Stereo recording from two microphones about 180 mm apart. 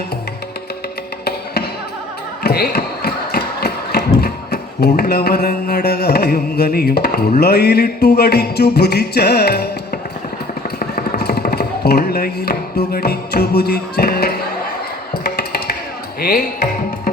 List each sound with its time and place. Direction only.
2.4 s mechanisms: 60° left (ahead or behind)
4.2 s mantra: 60° left (ahead or behind)
10.8 s music: 55° left (ahead or behind)
16.2 s mantra: 55° left (ahead or behind)